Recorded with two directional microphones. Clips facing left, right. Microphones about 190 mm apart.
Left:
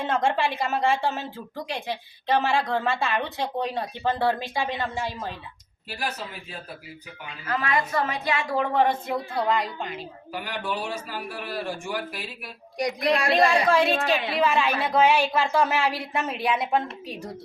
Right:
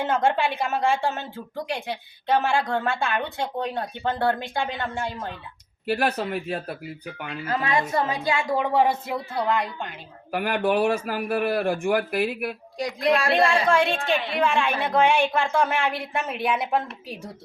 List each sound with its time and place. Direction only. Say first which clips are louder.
0.1 s a woman's voice: even; centre (ahead or behind)
5.8 s a man's voice: right 9 dB; 60° right (ahead or behind)
7.4 s a woman's voice: right 1 dB; 25° right (ahead or behind); by 10.0 s centre (ahead or behind)
10.3 s a man's voice: right 9 dB; 60° right (ahead or behind)
13.3 s a woman's voice: even; centre (ahead or behind)